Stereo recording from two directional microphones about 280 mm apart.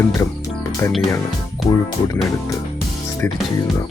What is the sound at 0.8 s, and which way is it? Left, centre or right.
Speech, centre.